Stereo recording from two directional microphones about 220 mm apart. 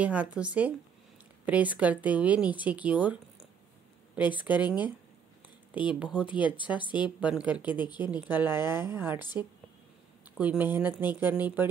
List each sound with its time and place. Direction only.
0.0 s speech: 5° right (ahead or behind)
5.9 s speech: 5° right (ahead or behind)
6.8 s speech: 20° left (ahead or behind)
7.2 s speech: 5° right (ahead or behind)
10.3 s speech: 5° right (ahead or behind)